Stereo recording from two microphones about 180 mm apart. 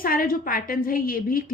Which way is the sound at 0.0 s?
55° left (ahead or behind).